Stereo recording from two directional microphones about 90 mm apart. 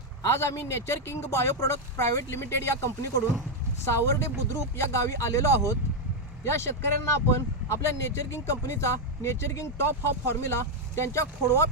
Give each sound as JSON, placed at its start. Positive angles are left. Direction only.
{"t": 0.3, "sound": "speech", "side_deg": 30}